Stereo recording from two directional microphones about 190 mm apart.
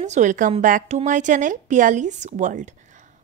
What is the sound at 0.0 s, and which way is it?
A woman's voice, 40° right (ahead or behind).